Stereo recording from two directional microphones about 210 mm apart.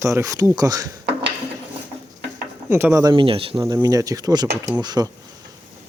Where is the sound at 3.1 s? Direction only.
25° right (ahead or behind).